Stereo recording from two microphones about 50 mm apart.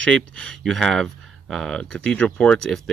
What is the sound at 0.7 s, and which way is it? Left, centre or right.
Speech, centre.